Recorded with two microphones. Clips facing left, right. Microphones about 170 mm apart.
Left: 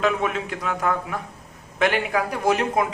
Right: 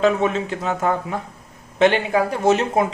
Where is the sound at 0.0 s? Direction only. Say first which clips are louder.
Right 5 dB; 30° right (ahead or behind).